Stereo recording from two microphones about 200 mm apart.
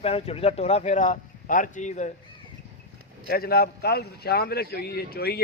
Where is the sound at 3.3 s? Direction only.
50° left (ahead or behind).